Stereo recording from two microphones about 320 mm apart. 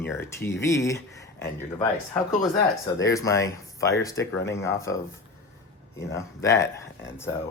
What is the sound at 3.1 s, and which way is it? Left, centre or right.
Speech, centre.